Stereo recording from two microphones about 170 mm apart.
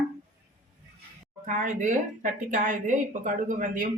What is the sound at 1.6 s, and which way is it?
Speech, 50° right (ahead or behind).